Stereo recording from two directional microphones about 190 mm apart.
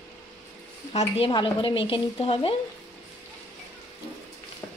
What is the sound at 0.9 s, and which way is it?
Speech, 30° left (ahead or behind).